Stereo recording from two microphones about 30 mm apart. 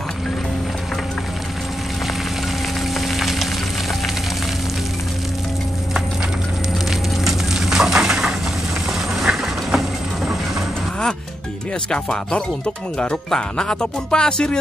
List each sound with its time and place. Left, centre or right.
3.0 s music: centre
7.5 s bird: centre
9.2 s vehicle: centre
11.9 s speech: left